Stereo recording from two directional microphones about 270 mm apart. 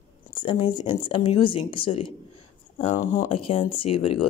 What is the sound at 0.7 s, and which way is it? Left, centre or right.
Speech, centre.